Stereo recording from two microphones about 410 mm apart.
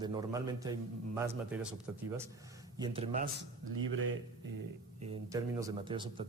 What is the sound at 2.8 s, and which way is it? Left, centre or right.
Speech, centre.